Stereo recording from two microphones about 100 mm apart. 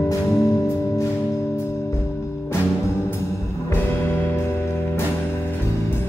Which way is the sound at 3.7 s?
20° left (ahead or behind).